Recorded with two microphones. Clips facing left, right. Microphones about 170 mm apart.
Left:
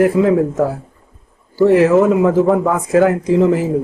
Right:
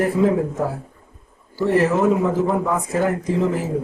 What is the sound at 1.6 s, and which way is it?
Speech, 90° left.